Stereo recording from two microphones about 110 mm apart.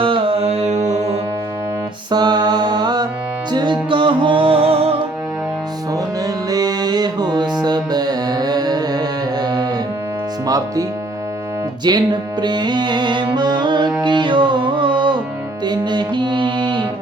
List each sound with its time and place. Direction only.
0.0 s music: 55° right (ahead or behind); by 0.8 s 80° right
2.0 s music: 40° right (ahead or behind); by 4.9 s 60° right (ahead or behind)
5.9 s music: 35° right (ahead or behind)
11.9 s music: 40° right (ahead or behind)